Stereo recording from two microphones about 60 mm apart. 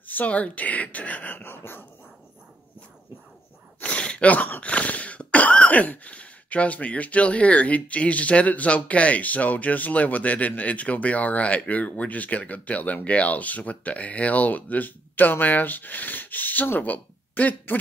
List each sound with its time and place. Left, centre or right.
0.0 s throat clearing: left
3.8 s throat clearing: centre